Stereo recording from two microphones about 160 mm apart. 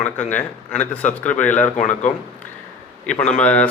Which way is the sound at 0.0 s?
10° left (ahead or behind).